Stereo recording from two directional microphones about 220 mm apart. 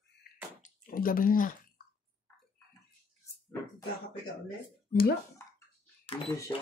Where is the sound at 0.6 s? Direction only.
40° left (ahead or behind).